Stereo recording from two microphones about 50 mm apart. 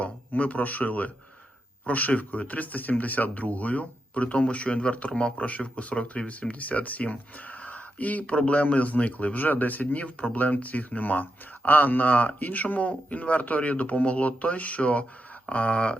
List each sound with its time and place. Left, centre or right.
0.0 s speech: left